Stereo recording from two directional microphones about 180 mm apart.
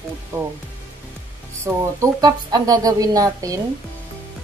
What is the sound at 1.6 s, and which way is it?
Speech, 20° right (ahead or behind).